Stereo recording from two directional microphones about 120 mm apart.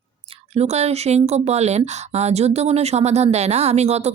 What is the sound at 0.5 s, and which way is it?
Speech, 65° right (ahead or behind).